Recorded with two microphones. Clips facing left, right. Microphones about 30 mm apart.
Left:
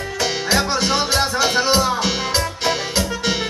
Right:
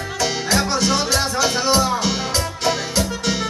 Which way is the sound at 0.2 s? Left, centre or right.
Centre.